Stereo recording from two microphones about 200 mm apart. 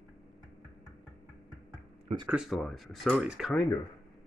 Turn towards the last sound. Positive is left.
turn(degrees=0)  # may be behind; listen again after turning